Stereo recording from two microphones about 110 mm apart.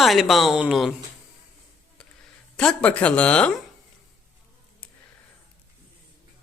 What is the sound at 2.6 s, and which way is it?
A woman's voice, 10° left (ahead or behind).